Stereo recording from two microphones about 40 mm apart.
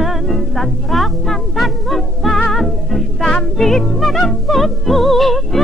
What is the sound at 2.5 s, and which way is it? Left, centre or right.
Music, centre.